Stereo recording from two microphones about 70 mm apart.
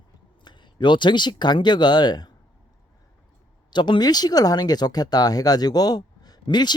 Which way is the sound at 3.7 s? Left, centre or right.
Left.